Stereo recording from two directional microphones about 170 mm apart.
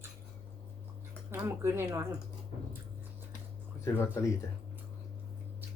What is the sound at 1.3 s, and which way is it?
Speech, 15° right (ahead or behind).